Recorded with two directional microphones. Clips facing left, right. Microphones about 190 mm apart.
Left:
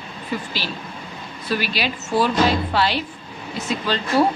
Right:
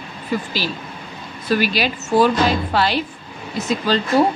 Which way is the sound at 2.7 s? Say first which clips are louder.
Right 2 dB; 45° right (ahead or behind).